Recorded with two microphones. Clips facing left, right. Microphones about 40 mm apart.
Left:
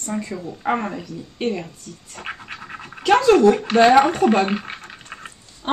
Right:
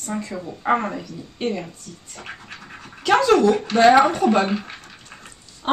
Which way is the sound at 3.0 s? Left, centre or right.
Centre.